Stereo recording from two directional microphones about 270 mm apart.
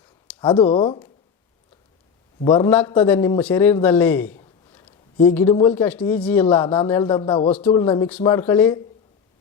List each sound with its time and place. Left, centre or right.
0.3 s speech: centre
2.4 s a man's voice: centre